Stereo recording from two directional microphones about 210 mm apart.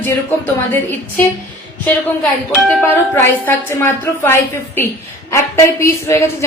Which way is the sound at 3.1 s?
10° left (ahead or behind).